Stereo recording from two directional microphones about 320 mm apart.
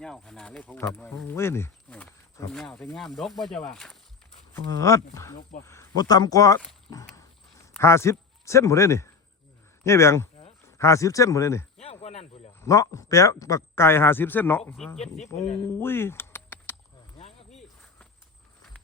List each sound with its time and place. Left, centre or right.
0.0 s speech: centre
12.5 s speech: centre
15.6 s keys jangling: centre
17.2 s snake: centre